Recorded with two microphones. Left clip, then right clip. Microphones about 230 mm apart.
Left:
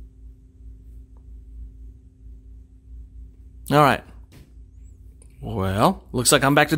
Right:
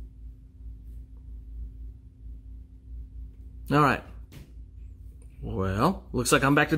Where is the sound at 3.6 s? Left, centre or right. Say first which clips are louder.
Left 6 dB; left.